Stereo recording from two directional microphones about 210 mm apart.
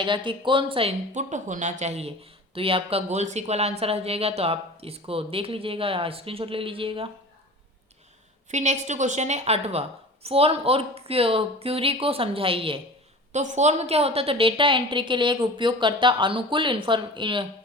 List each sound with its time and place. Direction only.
0.0 s speech: 25° right (ahead or behind)
8.4 s a woman's voice: 35° right (ahead or behind)